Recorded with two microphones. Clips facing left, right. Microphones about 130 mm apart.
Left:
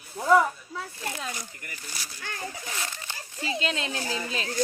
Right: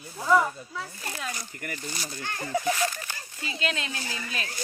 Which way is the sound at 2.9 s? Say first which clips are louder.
Right 1 dB; 25° left (ahead or behind).